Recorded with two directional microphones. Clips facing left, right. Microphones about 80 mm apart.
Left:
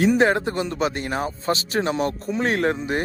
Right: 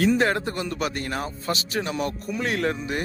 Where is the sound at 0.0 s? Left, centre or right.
Left.